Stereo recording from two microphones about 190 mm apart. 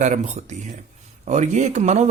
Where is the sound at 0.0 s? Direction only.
40° right (ahead or behind).